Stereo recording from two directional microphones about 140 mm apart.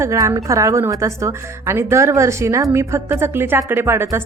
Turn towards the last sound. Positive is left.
turn(degrees=-15)  # may be behind; listen again after turning